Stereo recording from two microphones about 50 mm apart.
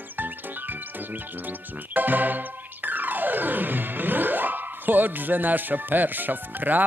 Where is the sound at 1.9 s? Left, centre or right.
Right.